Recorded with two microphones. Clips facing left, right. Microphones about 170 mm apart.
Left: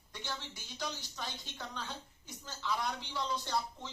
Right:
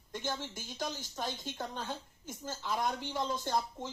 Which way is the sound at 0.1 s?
45° right (ahead or behind).